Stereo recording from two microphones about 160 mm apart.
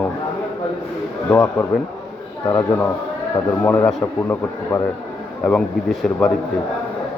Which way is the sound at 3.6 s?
10° left (ahead or behind).